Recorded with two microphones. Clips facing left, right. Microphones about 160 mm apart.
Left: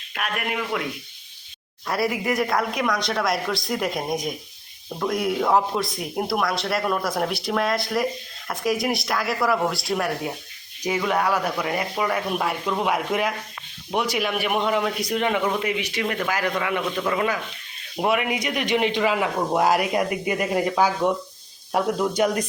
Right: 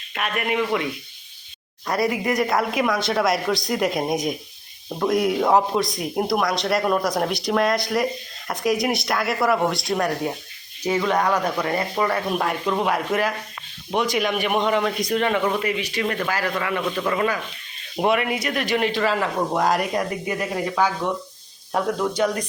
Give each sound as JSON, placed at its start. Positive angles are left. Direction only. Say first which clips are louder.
{"t": 0.1, "sound": "speech", "louder": "right 3 dB", "side_deg": 0}
{"t": 1.9, "sound": "speech", "louder": "right 2 dB", "side_deg": 0}